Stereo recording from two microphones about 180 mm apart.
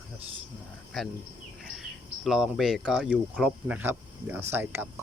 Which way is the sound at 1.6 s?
Centre (ahead or behind).